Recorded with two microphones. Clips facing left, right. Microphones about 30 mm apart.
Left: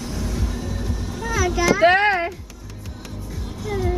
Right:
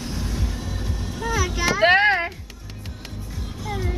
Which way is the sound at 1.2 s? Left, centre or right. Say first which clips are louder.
Left 4 dB; centre.